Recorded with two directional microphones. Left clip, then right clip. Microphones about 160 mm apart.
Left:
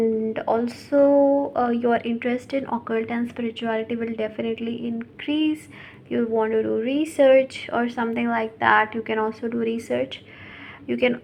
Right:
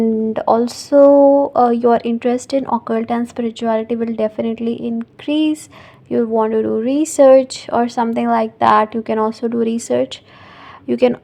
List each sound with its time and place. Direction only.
0.0 s a woman's voice: 50° right (ahead or behind)